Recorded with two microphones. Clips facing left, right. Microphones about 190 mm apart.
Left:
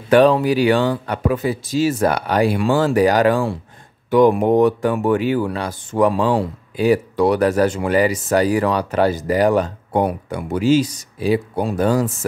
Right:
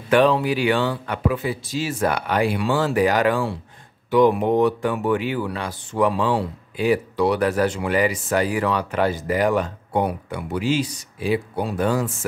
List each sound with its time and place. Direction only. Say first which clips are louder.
0.1 s speech: left 4 dB; 40° left (ahead or behind)